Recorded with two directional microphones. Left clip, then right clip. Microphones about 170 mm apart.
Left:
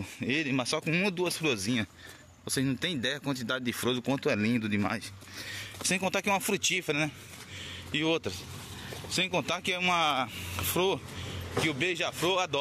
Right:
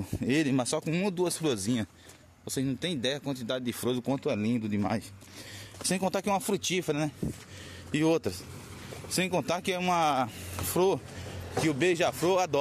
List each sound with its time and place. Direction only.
0.0 s speech: 40° right (ahead or behind)
0.8 s speech: 15° right (ahead or behind)
1.1 s speech: 45° right (ahead or behind)
2.4 s speech: 5° right (ahead or behind)
5.9 s speech: 30° right (ahead or behind)
7.9 s speech: 45° right (ahead or behind)